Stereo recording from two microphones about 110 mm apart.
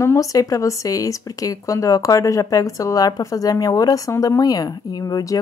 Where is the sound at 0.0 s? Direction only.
30° left (ahead or behind).